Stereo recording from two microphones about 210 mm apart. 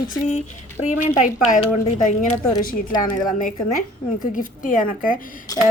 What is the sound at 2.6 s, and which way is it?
Speech, 40° left (ahead or behind).